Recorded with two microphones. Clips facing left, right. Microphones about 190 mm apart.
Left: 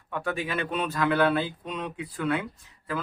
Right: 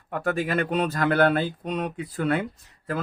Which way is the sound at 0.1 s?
45° right (ahead or behind).